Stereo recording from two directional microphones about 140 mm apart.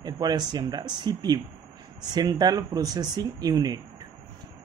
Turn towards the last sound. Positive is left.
turn(degrees=-30)  # may be behind; listen again after turning